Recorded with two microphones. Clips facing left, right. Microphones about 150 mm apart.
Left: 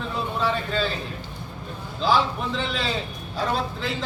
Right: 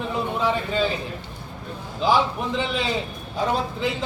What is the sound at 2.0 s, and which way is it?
A man's voice, 15° right (ahead or behind).